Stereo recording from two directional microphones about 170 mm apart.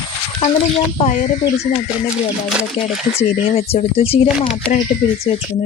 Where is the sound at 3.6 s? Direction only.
35° left (ahead or behind).